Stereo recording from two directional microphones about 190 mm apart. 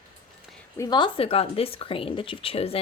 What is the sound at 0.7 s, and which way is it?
A woman's voice, 20° left (ahead or behind).